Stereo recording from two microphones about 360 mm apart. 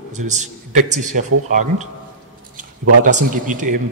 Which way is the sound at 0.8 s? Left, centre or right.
Centre.